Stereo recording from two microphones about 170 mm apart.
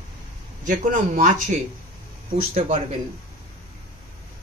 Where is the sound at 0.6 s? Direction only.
50° right (ahead or behind).